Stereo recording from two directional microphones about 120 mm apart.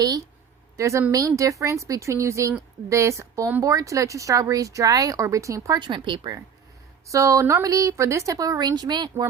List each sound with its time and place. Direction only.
0.8 s a woman's voice: 25° right (ahead or behind)
5.8 s speech: 40° right (ahead or behind)
7.1 s a woman's voice: 25° right (ahead or behind)